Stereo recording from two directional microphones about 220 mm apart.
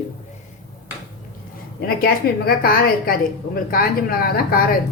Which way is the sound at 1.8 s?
45° left (ahead or behind).